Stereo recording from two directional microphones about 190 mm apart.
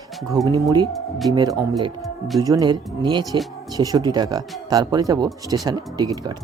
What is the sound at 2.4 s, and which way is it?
Speech, 20° right (ahead or behind).